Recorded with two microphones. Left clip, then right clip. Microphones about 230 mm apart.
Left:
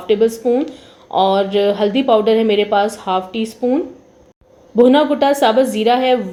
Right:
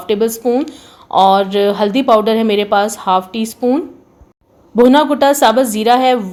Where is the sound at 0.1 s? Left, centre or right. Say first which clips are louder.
Even; right.